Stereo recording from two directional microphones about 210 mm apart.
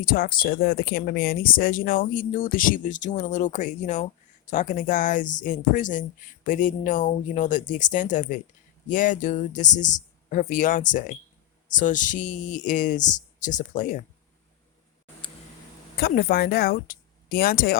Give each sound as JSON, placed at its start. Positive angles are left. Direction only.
{"t": 0.0, "sound": "speech", "side_deg": 40}
{"t": 16.0, "sound": "speech", "side_deg": 45}